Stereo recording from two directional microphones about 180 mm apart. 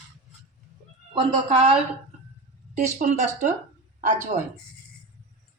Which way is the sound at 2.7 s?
45° right (ahead or behind).